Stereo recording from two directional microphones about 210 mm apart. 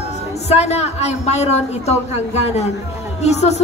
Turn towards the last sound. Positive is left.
turn(degrees=30)  # may be behind; listen again after turning